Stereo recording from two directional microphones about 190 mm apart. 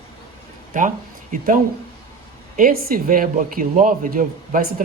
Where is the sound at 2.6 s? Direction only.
50° right (ahead or behind).